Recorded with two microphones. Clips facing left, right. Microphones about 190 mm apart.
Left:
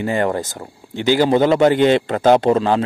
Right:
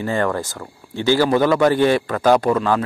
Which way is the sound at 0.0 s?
20° left (ahead or behind).